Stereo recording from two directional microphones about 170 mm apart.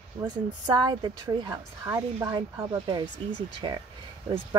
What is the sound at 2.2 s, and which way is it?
Speech, 25° right (ahead or behind).